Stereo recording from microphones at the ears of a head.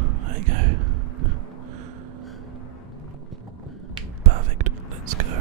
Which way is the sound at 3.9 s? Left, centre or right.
Right.